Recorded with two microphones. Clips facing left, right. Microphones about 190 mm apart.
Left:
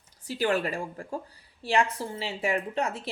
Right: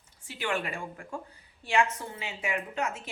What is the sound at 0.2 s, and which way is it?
A woman's voice, 40° left (ahead or behind).